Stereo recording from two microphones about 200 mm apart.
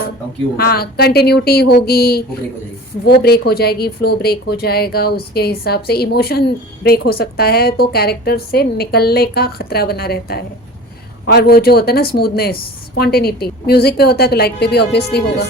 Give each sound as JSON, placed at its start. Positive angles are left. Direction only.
{"t": 0.5, "sound": "a woman's voice", "side_deg": 50}